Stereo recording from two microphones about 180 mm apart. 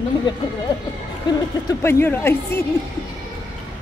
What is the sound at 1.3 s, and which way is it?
Speech, 25° left (ahead or behind).